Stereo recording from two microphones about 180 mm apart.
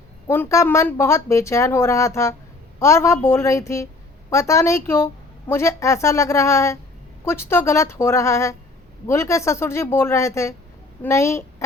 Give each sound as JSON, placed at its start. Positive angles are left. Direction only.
{"t": 0.3, "sound": "a woman's voice", "side_deg": 15}